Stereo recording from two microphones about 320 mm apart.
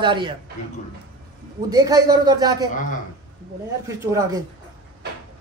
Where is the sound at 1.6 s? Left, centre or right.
Centre.